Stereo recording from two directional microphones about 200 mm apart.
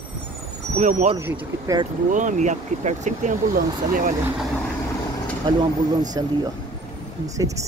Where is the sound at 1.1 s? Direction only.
15° right (ahead or behind).